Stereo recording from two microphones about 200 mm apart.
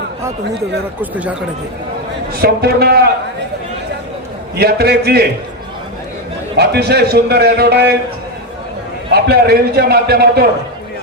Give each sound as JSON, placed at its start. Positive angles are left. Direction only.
{"t": 1.1, "sound": "speech", "side_deg": -5}
{"t": 2.3, "sound": "a man's voice", "side_deg": -50}
{"t": 4.5, "sound": "a man's voice", "side_deg": -55}
{"t": 6.6, "sound": "a man's voice", "side_deg": -55}
{"t": 9.1, "sound": "a man's voice", "side_deg": -50}